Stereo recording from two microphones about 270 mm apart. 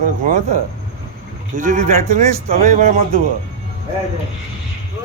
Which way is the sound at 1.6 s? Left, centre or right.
Right.